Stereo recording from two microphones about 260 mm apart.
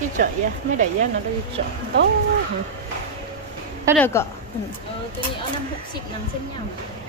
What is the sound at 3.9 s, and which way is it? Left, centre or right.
Speech, centre.